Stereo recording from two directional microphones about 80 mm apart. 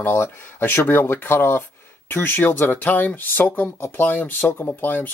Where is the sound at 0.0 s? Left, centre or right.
Left.